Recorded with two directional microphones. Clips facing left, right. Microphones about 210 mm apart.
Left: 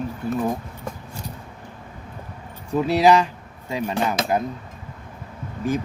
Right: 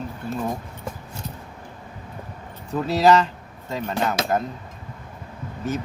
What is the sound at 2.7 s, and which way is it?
Cutlery, 15° left (ahead or behind).